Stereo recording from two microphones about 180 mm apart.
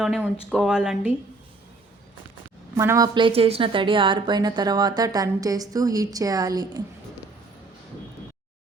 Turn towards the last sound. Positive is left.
turn(degrees=-20)  # may be behind; listen again after turning